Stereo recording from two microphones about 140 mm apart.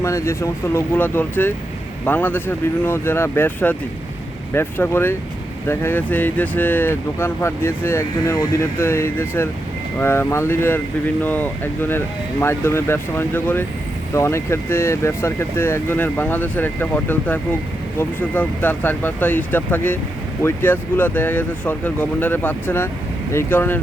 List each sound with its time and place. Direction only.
0.0 s speech: 20° left (ahead or behind)